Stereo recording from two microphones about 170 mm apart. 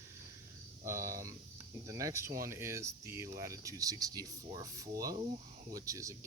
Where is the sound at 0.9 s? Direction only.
15° right (ahead or behind).